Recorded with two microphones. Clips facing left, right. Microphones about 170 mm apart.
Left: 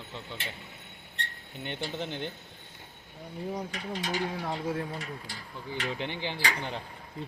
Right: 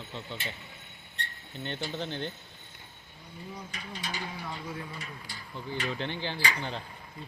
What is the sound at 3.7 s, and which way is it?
Mechanisms, 90° left.